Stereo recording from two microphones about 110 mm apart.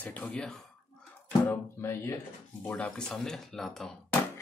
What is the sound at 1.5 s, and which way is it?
Speech, 25° left (ahead or behind).